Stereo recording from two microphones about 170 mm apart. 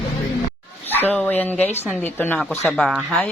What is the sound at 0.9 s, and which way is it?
Speech, 10° left (ahead or behind).